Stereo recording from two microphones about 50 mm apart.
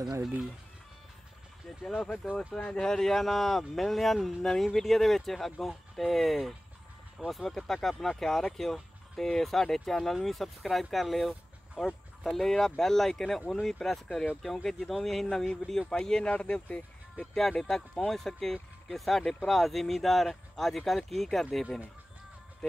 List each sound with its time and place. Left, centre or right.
2.3 s speech: centre
17.3 s speech: centre